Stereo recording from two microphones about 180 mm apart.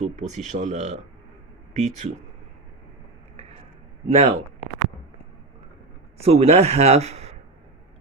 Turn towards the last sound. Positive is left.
turn(degrees=-35)  # may be behind; listen again after turning